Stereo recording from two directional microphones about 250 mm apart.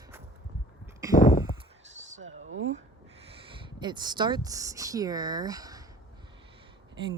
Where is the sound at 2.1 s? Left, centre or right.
Right.